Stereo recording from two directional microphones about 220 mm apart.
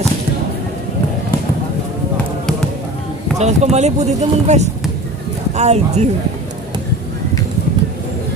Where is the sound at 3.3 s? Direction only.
30° right (ahead or behind).